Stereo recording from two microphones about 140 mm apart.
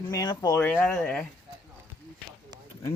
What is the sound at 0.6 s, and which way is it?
Speech, 15° left (ahead or behind).